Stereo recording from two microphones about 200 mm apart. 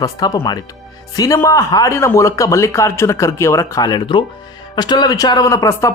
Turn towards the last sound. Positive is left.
turn(degrees=15)  # may be behind; listen again after turning